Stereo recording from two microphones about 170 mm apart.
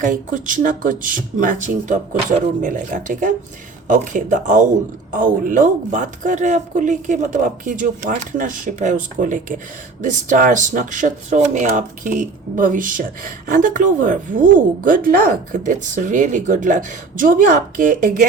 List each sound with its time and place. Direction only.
0.0 s speech: 50° right (ahead or behind)